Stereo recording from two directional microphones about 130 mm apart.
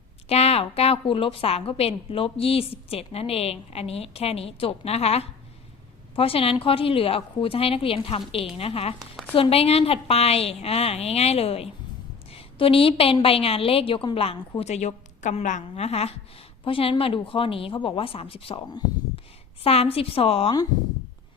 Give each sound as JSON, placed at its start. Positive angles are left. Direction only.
{"t": 0.3, "sound": "a woman's voice", "side_deg": 50}
{"t": 16.6, "sound": "a woman's voice", "side_deg": 45}
{"t": 19.6, "sound": "a woman's voice", "side_deg": 50}